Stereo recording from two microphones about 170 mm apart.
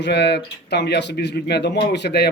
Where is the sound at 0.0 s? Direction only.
80° left.